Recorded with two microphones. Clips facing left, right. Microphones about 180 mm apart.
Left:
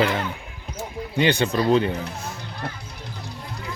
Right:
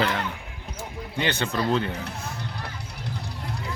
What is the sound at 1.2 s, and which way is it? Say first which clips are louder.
Speech: left 6 dB; 15° left (ahead or behind).